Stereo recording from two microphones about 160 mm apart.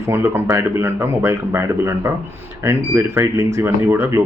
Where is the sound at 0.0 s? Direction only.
15° right (ahead or behind).